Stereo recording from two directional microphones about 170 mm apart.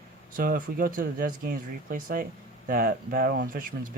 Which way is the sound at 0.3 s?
55° right (ahead or behind).